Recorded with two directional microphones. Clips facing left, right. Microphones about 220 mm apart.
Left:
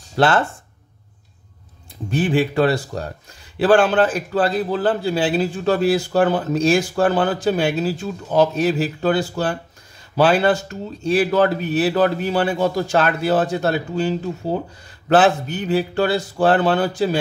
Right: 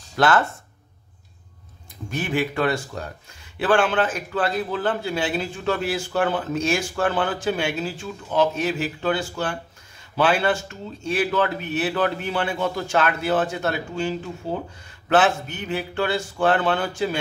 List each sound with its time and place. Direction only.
0.1 s speech: 30° left (ahead or behind)
2.0 s a man's voice: 30° left (ahead or behind)